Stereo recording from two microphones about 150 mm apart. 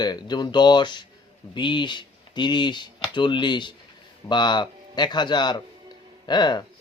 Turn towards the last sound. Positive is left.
turn(degrees=30)  # may be behind; listen again after turning